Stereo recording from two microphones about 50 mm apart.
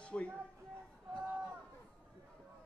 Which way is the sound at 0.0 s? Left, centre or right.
Left.